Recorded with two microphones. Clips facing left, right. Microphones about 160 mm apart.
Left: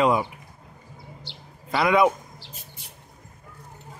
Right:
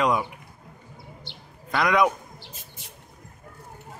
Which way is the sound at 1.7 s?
5° left (ahead or behind).